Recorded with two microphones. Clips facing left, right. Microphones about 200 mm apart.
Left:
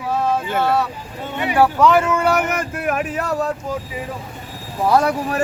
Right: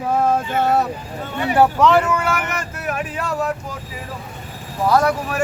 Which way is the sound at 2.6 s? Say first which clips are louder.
Left 4 dB; 50° left (ahead or behind).